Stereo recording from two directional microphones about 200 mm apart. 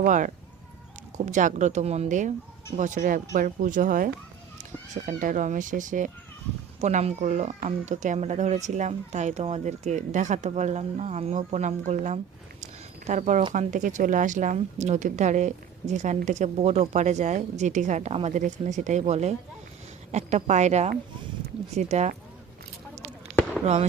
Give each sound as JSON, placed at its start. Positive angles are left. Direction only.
{"t": 0.0, "sound": "speech", "side_deg": -40}